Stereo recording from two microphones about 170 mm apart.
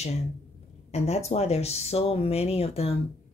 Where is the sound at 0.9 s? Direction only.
40° left (ahead or behind).